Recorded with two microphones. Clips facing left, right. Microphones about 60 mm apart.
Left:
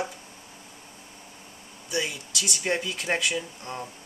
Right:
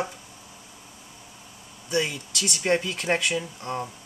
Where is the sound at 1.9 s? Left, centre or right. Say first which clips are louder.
Right 4 dB; right.